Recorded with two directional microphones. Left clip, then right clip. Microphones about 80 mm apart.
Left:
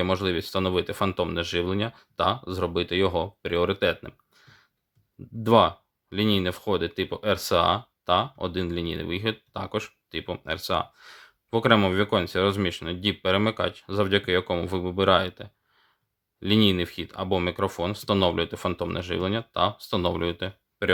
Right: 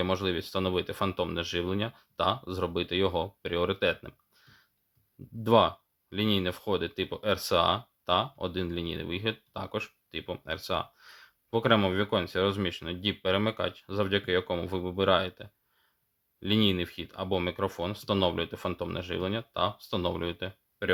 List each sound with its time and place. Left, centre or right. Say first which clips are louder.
0.0 s speech: left 4 dB; left